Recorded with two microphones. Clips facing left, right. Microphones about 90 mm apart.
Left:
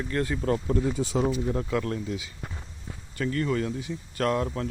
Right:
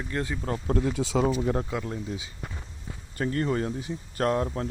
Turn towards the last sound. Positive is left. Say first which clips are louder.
# right 1 dB
turn(degrees=-30)  # may be behind; listen again after turning